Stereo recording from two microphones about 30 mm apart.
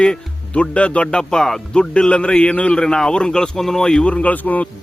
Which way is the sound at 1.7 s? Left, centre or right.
Left.